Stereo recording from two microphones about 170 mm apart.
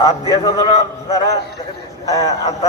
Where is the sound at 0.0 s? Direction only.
25° left (ahead or behind).